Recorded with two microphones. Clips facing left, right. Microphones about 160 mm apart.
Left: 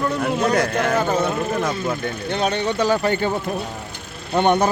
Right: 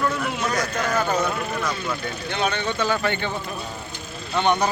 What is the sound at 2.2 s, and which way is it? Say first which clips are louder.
Speech: left 3 dB; 35° left (ahead or behind).